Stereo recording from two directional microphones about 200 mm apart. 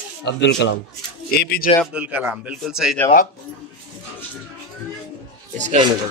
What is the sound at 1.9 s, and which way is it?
Speech, 5° right (ahead or behind).